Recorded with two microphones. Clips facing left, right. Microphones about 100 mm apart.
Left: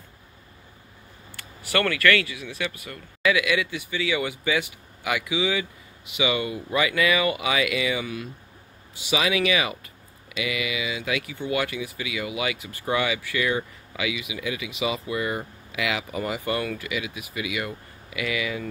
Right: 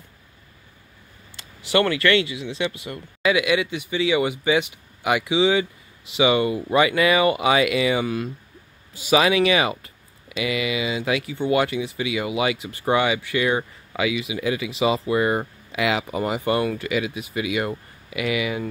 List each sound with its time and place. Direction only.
1.3 s speech: 20° right (ahead or behind)
16.8 s speech: 35° right (ahead or behind)